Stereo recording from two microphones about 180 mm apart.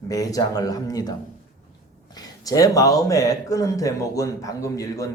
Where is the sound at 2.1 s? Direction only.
20° left (ahead or behind).